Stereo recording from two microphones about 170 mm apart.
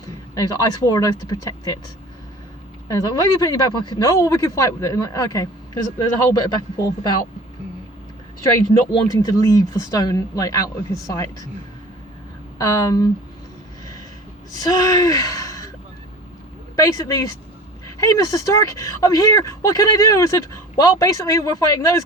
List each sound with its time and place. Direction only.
0.3 s speech: 20° left (ahead or behind)
2.9 s speech: 20° left (ahead or behind)
8.5 s speech: 20° left (ahead or behind)
12.5 s speech: 20° left (ahead or behind)
14.6 s speech: 20° left (ahead or behind)
16.7 s speech: 20° left (ahead or behind)